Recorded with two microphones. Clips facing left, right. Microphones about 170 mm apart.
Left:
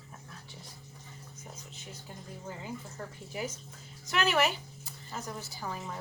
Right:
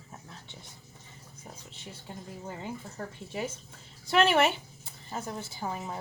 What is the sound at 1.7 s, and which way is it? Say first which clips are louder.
Speech: right 1 dB; 30° right (ahead or behind).